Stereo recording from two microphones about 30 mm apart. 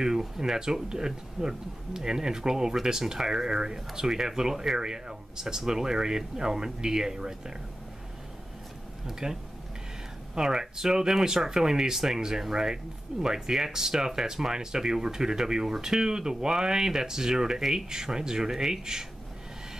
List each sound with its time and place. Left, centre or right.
0.4 s speech: right
9.2 s speech: right